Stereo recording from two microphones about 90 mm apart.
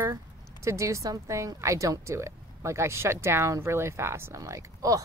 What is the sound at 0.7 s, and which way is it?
A woman's voice, 35° right (ahead or behind).